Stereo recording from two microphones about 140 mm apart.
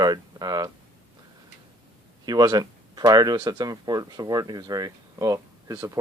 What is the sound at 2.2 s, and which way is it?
Speech, 30° right (ahead or behind).